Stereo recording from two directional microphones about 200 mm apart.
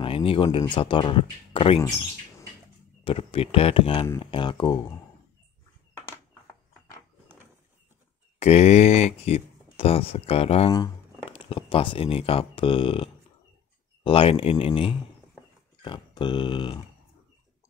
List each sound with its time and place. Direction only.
0.0 s speech: 25° left (ahead or behind)
3.0 s speech: 25° left (ahead or behind)
8.4 s speech: 35° left (ahead or behind)